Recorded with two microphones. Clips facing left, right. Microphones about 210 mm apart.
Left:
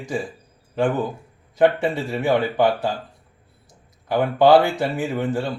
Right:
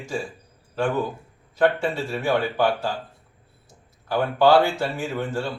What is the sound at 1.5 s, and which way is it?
Speech, 20° left (ahead or behind).